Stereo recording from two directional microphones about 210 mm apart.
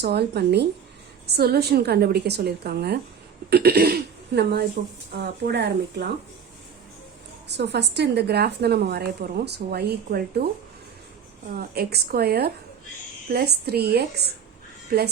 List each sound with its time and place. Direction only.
0.0 s a woman's voice: 50° right (ahead or behind)
7.4 s a woman's voice: 55° right (ahead or behind)
11.5 s a woman's voice: 50° right (ahead or behind)